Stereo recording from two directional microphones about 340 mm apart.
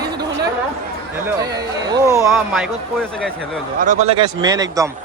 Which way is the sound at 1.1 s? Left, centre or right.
Centre.